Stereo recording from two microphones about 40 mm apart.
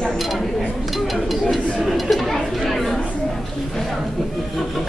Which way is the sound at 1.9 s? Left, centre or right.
Centre.